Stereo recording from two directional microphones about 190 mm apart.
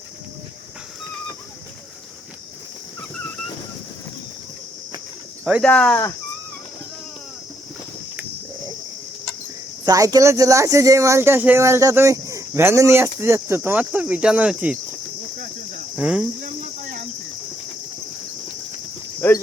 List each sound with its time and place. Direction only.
5.6 s speech: 5° left (ahead or behind)
9.8 s speech: 20° right (ahead or behind)
16.0 s speech: 5° right (ahead or behind)
16.4 s cricket: 45° right (ahead or behind)
19.2 s speech: 10° left (ahead or behind)